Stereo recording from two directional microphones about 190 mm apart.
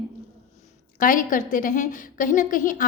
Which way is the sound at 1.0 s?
45° left (ahead or behind).